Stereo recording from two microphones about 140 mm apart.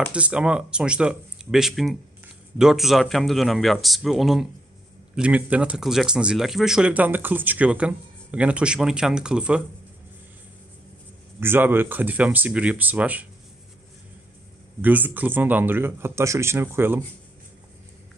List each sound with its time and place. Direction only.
0.1 s speech: 10° right (ahead or behind)
11.3 s speech: 15° right (ahead or behind)
14.8 s speech: 10° right (ahead or behind)